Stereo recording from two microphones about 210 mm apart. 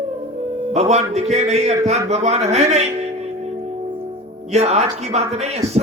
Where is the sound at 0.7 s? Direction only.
30° right (ahead or behind).